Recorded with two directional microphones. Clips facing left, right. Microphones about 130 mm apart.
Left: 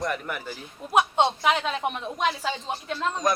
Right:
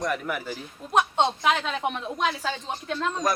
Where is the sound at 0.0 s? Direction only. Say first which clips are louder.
Right 1 dB; centre (ahead or behind).